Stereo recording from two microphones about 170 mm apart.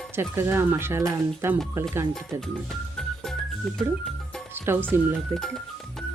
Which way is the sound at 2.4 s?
Centre (ahead or behind).